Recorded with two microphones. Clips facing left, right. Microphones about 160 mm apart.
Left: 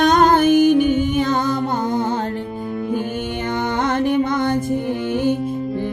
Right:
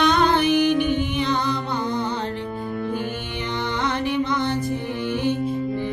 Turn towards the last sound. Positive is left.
turn(degrees=50)  # may be behind; listen again after turning